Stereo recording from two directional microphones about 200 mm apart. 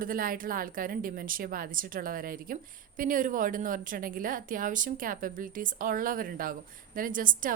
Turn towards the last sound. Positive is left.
turn(degrees=-40)  # may be behind; listen again after turning